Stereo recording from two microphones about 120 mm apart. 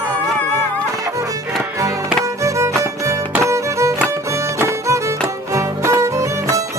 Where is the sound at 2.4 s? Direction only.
25° right (ahead or behind).